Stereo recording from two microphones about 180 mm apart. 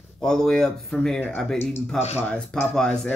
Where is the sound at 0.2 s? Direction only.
5° left (ahead or behind).